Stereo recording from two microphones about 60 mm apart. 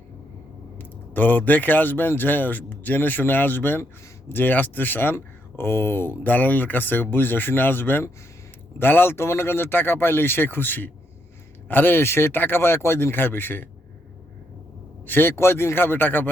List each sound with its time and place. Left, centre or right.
0.8 s speech: left
15.0 s speech: left